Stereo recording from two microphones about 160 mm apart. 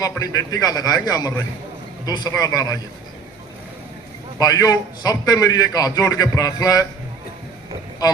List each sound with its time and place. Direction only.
0.2 s a man's voice: 20° left (ahead or behind)
4.4 s a man's voice: 20° left (ahead or behind)